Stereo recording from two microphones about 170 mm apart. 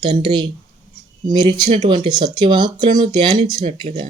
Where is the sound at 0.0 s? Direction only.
25° right (ahead or behind).